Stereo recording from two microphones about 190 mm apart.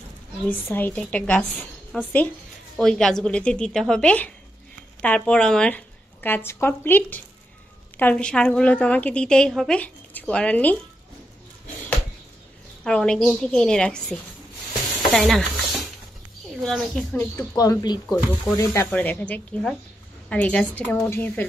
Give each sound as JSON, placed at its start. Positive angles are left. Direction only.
{"t": 0.7, "sound": "a woman's voice", "side_deg": 10}
{"t": 12.8, "sound": "a woman's voice", "side_deg": 5}
{"t": 15.0, "sound": "stir", "side_deg": 0}
{"t": 16.6, "sound": "a woman's voice", "side_deg": 0}
{"t": 17.6, "sound": "speech", "side_deg": 20}
{"t": 18.0, "sound": "a woman's voice", "side_deg": 0}
{"t": 18.6, "sound": "speech", "side_deg": 15}